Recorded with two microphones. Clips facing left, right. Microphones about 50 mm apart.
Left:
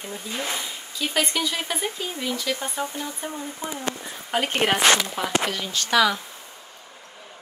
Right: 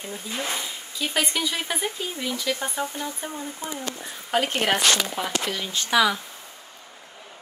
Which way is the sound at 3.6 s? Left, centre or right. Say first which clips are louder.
Left 2 dB; left.